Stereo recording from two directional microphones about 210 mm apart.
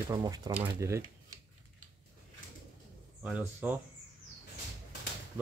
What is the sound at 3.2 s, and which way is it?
Speech, 5° right (ahead or behind).